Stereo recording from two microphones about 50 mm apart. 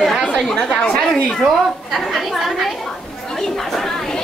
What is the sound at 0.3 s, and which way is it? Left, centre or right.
Speech, centre.